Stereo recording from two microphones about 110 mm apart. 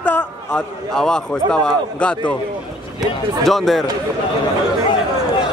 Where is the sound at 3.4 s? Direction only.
Centre (ahead or behind).